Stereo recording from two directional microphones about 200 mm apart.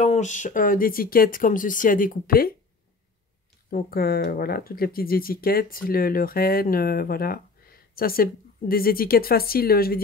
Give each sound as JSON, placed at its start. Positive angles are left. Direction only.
{"t": 0.0, "sound": "speech", "side_deg": 35}
{"t": 3.7, "sound": "speech", "side_deg": 50}